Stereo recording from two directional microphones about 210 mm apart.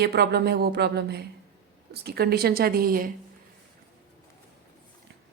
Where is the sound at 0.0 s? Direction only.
50° right (ahead or behind).